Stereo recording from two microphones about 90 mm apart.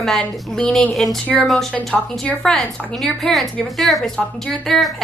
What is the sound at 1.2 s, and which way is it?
Speech, 15° left (ahead or behind).